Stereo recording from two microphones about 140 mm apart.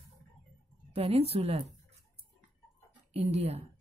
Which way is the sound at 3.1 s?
50° right (ahead or behind).